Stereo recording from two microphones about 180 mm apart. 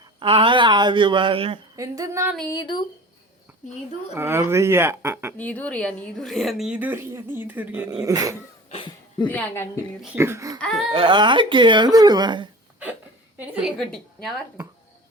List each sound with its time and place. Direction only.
0.2 s speech: 30° right (ahead or behind)
1.7 s speech: 20° right (ahead or behind)
2.5 s speech: 25° left (ahead or behind)
4.1 s speech: 15° right (ahead or behind)
5.4 s a woman's voice: 10° left (ahead or behind); by 8.4 s 20° right (ahead or behind)
8.7 s a sound: 30° left (ahead or behind)
9.2 s a woman's voice: 10° left (ahead or behind)
10.0 s speech: 10° right (ahead or behind)
10.9 s speech: 25° right (ahead or behind)
13.3 s a woman's voice: 10° right (ahead or behind)